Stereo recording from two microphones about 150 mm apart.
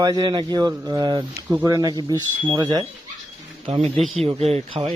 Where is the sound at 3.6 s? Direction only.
40° right (ahead or behind).